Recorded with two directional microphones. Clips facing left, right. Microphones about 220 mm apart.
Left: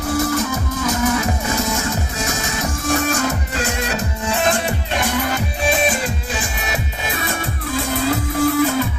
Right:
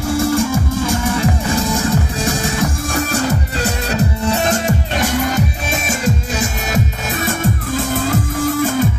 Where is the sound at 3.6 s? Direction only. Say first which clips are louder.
Right 4 dB; 40° right (ahead or behind).